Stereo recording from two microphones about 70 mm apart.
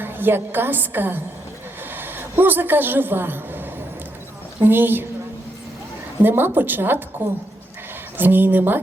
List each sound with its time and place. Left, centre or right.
0.0 s a woman's voice: right
4.6 s a woman's voice: right
6.2 s a woman's voice: right